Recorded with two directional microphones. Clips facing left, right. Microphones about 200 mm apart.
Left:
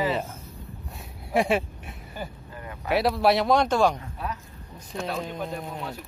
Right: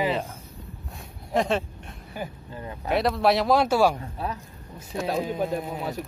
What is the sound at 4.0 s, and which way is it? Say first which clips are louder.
Speech: right 2 dB; 35° right (ahead or behind).